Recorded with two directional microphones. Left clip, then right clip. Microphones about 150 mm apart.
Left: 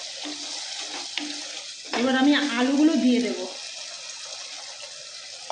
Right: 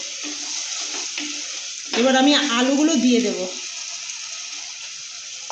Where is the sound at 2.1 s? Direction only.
70° right (ahead or behind).